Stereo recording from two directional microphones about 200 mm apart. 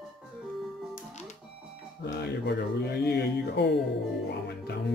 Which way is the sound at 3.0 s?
55° left (ahead or behind).